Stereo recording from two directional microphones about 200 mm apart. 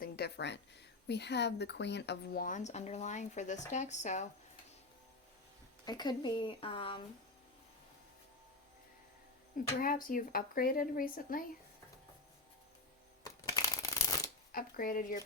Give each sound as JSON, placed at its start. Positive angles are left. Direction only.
{"t": 0.0, "sound": "speech", "side_deg": 55}
{"t": 5.8, "sound": "speech", "side_deg": 20}
{"t": 9.8, "sound": "speech", "side_deg": 45}
{"t": 13.2, "sound": "shuffling cards", "side_deg": 20}
{"t": 14.5, "sound": "speech", "side_deg": 45}